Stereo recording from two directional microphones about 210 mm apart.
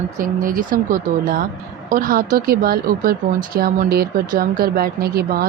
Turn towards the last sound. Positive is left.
turn(degrees=-45)  # may be behind; listen again after turning